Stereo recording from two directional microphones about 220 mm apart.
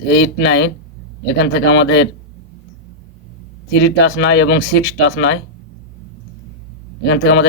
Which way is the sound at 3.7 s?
50° left (ahead or behind).